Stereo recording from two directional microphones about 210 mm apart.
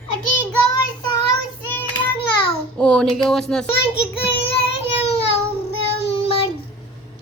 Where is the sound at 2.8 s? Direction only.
5° left (ahead or behind).